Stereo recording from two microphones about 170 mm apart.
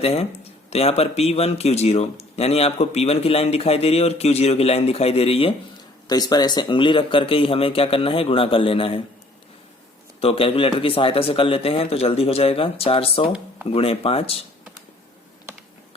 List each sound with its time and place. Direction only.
0.0 s a man's voice: 35° left (ahead or behind)
6.1 s a man's voice: 25° left (ahead or behind)
10.2 s a man's voice: 35° left (ahead or behind)